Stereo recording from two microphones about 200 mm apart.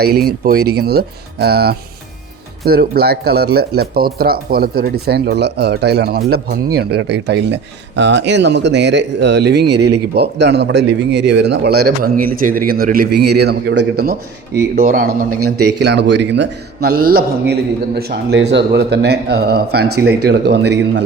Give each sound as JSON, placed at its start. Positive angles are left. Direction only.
{"t": 0.0, "sound": "speech", "side_deg": -50}
{"t": 11.9, "sound": "speech", "side_deg": -45}
{"t": 15.4, "sound": "speech", "side_deg": -55}